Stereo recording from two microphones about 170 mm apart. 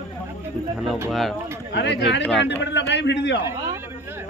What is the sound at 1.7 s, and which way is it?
A man's voice, 90° left.